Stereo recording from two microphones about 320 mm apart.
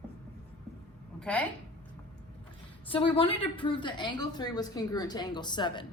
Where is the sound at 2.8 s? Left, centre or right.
Centre.